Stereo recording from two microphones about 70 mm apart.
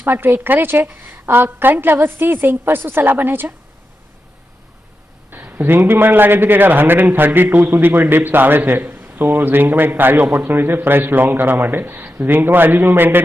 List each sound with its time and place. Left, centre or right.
0.0 s a woman's voice: right
5.3 s a man's voice: right